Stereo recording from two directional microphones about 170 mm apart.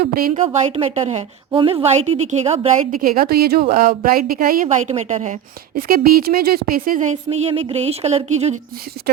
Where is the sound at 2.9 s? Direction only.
60° right (ahead or behind); by 5.3 s 40° right (ahead or behind).